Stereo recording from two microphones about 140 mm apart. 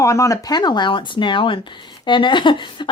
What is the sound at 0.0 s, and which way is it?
A woman's voice, 20° left (ahead or behind).